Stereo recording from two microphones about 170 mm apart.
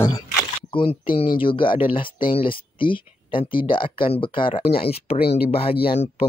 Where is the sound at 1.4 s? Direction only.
30° left (ahead or behind).